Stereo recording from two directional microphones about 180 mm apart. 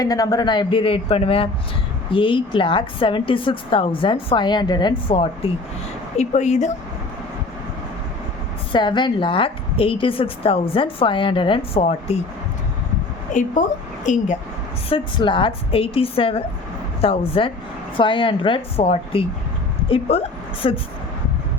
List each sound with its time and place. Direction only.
0.0 s a woman's voice: 20° left (ahead or behind)
6.1 s a woman's voice: 40° left (ahead or behind)
8.7 s a woman's voice: 25° left (ahead or behind)
13.3 s a woman's voice: 45° left (ahead or behind)
14.8 s a woman's voice: 30° left (ahead or behind)